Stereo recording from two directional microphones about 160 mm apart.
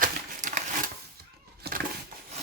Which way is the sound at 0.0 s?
55° right (ahead or behind).